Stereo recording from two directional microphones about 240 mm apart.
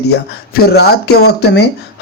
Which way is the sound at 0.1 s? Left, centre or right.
Left.